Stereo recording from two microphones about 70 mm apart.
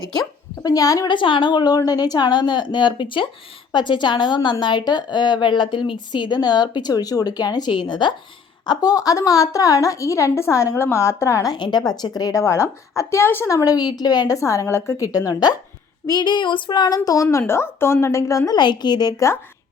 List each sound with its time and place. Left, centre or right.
0.1 s a woman's voice: left
8.6 s a woman's voice: left
11.4 s a woman's voice: left
12.3 s a woman's voice: left
13.7 s a woman's voice: left
14.3 s a woman's voice: left
16.0 s a woman's voice: left
17.3 s a woman's voice: left
18.5 s a woman's voice: left